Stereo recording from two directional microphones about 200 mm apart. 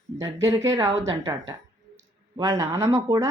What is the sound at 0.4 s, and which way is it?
Speech, 15° right (ahead or behind).